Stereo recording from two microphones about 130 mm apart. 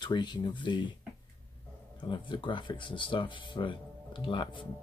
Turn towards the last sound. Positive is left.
turn(degrees=40)  # may be behind; listen again after turning